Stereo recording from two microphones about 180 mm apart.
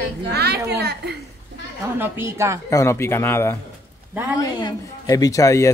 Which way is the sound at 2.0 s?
15° right (ahead or behind).